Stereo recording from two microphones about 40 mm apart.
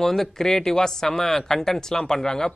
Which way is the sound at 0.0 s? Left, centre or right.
Centre.